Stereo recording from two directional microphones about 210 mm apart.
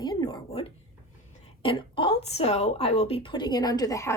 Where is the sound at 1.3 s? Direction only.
25° left (ahead or behind).